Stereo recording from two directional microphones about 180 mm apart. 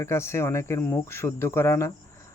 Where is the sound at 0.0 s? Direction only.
15° left (ahead or behind).